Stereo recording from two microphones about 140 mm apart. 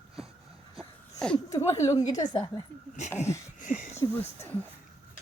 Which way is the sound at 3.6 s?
65° left (ahead or behind).